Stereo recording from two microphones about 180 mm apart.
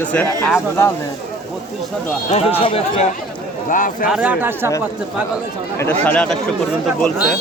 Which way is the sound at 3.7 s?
45° left (ahead or behind).